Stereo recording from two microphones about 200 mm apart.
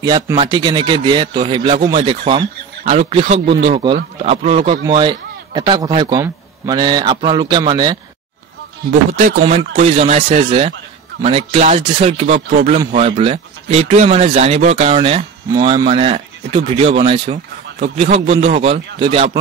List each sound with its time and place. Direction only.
0.0 s a man's voice: 20° right (ahead or behind)
9.1 s speech: 35° right (ahead or behind)